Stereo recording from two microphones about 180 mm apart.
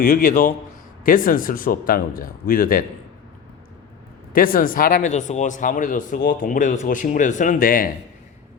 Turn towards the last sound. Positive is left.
turn(degrees=50)  # may be behind; listen again after turning